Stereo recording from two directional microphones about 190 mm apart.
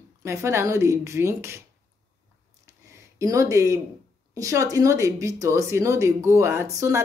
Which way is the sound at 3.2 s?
15° right (ahead or behind).